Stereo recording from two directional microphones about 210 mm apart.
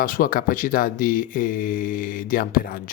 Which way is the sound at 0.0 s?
40° left (ahead or behind).